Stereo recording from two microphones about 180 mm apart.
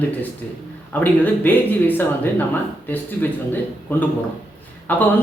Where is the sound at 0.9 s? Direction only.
10° left (ahead or behind).